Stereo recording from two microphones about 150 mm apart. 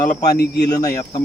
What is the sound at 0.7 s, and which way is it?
Speech, 25° left (ahead or behind).